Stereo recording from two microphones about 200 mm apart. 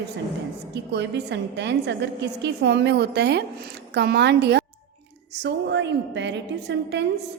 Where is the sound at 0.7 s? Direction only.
60° right (ahead or behind).